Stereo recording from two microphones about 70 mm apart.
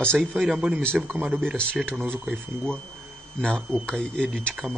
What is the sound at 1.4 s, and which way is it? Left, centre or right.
Speech, centre.